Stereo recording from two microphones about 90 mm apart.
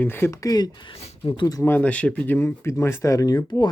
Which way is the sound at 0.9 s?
70° left (ahead or behind).